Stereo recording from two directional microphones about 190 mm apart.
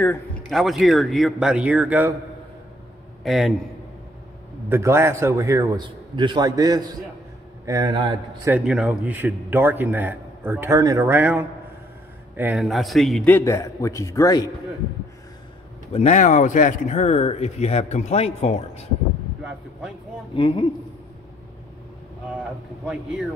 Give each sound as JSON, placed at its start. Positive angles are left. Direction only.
{"t": 0.5, "sound": "speech", "side_deg": 0}
{"t": 3.3, "sound": "speech", "side_deg": 0}
{"t": 4.6, "sound": "a man's voice", "side_deg": -15}
{"t": 8.5, "sound": "a man's voice", "side_deg": -5}
{"t": 15.9, "sound": "speech", "side_deg": 35}
{"t": 19.4, "sound": "a sound", "side_deg": 0}
{"t": 20.3, "sound": "speech", "side_deg": 30}
{"t": 22.3, "sound": "speech", "side_deg": 0}